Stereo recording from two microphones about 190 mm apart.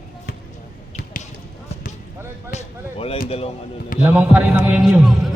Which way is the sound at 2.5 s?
35° left (ahead or behind).